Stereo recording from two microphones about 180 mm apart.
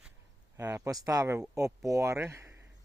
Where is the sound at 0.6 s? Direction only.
15° right (ahead or behind).